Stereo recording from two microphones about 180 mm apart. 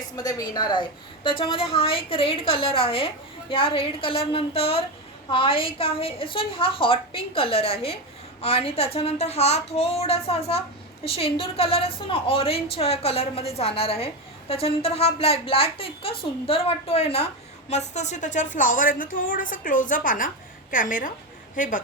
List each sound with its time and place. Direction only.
0.2 s a woman's voice: 20° left (ahead or behind); by 21.8 s 45° left (ahead or behind)